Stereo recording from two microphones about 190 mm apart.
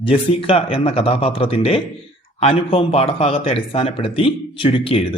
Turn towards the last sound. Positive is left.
turn(degrees=30)  # may be behind; listen again after turning